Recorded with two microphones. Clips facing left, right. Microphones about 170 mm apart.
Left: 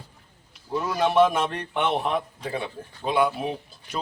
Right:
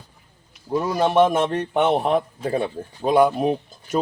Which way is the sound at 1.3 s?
45° right (ahead or behind).